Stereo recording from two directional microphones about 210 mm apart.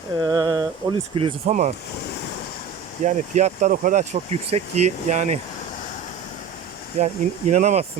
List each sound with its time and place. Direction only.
0.2 s speech: 20° right (ahead or behind)
3.0 s speech: 35° right (ahead or behind)
7.0 s speech: 30° right (ahead or behind)